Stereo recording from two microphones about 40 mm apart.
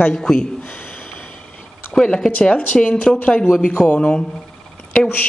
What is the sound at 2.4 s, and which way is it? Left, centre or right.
A woman's voice, left.